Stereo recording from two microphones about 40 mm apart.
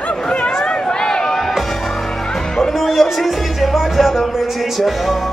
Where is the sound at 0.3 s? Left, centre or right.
Left.